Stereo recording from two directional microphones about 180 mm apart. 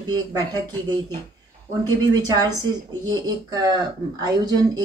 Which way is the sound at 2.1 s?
20° right (ahead or behind).